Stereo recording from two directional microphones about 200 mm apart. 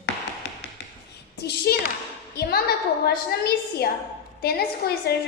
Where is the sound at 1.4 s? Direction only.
55° left (ahead or behind).